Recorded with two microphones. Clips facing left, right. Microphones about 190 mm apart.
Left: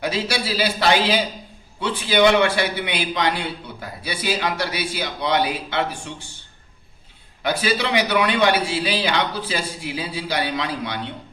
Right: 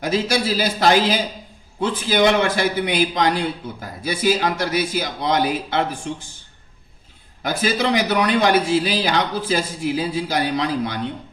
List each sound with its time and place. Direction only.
0.0 s a man's voice: 45° right (ahead or behind)
7.4 s a man's voice: 45° right (ahead or behind)